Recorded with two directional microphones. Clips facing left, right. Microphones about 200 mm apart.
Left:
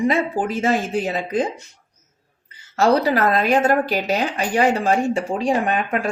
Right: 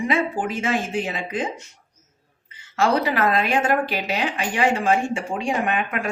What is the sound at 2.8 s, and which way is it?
Speech, 40° left (ahead or behind).